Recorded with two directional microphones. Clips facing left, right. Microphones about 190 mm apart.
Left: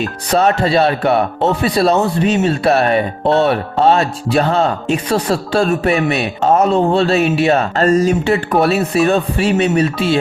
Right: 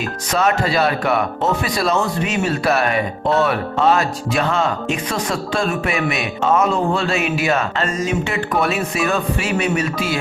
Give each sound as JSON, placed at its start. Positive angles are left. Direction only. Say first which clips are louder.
{"t": 0.3, "sound": "speech", "louder": "left 5 dB", "side_deg": 30}